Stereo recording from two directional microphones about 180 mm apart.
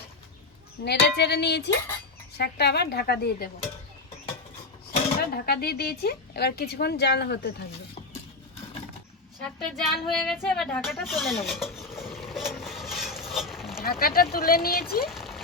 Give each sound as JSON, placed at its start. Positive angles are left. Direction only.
{"t": 0.9, "sound": "speech", "side_deg": 65}
{"t": 4.9, "sound": "speech", "side_deg": 60}
{"t": 9.8, "sound": "snake", "side_deg": 0}
{"t": 13.8, "sound": "speech", "side_deg": 55}
{"t": 15.1, "sound": "a sound", "side_deg": 0}